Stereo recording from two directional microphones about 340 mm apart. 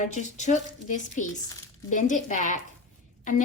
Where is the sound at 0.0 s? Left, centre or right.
Left.